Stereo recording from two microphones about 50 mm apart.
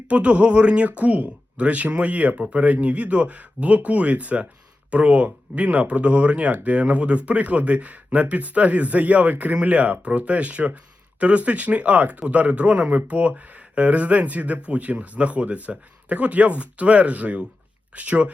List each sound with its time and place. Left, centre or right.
0.1 s speech: right